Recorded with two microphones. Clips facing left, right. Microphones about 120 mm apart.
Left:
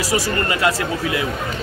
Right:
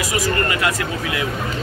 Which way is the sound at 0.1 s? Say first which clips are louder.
Even; 25° left (ahead or behind).